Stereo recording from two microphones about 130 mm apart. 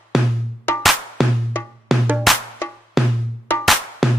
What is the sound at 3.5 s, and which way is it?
Music, 15° left (ahead or behind).